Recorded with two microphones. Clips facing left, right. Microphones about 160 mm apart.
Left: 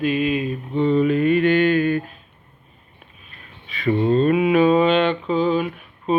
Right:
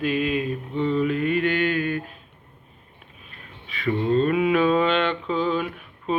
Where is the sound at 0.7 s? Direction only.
25° left (ahead or behind).